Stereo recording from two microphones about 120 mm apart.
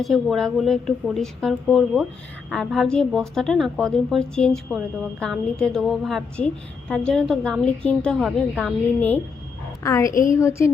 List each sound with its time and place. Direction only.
0.0 s a woman's voice: centre (ahead or behind)
9.0 s a woman's voice: 15° left (ahead or behind)
9.8 s a woman's voice: 25° left (ahead or behind)
10.1 s a woman's voice: 90° left
10.3 s a woman's voice: 25° left (ahead or behind)